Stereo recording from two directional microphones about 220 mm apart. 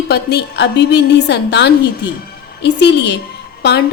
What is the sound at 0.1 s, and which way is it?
A woman's voice, 50° left (ahead or behind).